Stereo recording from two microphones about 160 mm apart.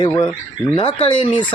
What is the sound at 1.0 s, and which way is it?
Speech, 40° left (ahead or behind).